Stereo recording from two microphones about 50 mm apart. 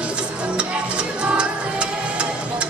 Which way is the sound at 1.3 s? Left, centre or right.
Right.